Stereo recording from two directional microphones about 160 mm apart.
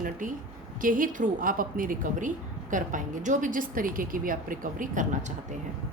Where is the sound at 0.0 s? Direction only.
55° right (ahead or behind).